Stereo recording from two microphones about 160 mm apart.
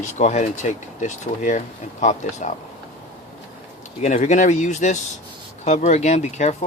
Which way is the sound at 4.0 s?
45° left (ahead or behind).